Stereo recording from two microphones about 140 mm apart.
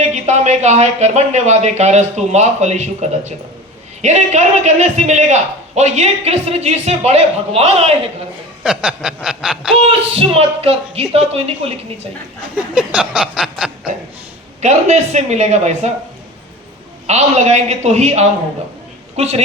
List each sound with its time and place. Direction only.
0.1 s a man's voice: 55° right (ahead or behind)
8.6 s snicker: 5° right (ahead or behind)
10.2 s a man's voice: 45° right (ahead or behind)
12.7 s snicker: 5° right (ahead or behind)
14.6 s speech: 55° right (ahead or behind)
17.1 s a man's voice: 50° right (ahead or behind)